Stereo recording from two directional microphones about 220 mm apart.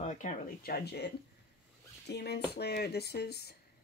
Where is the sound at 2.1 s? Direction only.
45° left (ahead or behind).